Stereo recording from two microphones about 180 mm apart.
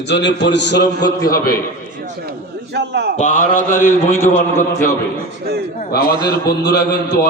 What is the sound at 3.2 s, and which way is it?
Speech, 45° left (ahead or behind).